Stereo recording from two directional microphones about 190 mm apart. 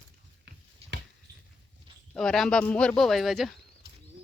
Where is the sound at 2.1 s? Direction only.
5° left (ahead or behind).